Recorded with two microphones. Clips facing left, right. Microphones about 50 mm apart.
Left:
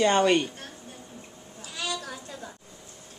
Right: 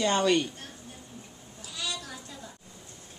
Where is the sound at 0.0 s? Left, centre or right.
Left.